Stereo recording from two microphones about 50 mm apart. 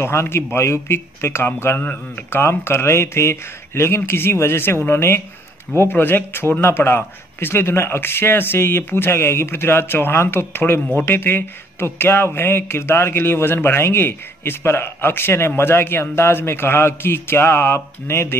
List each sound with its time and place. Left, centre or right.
0.0 s speech: left
1.8 s speech: left
2.3 s speech: left